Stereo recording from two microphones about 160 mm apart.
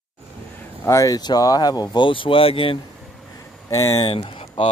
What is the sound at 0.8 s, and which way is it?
Speech, 20° left (ahead or behind).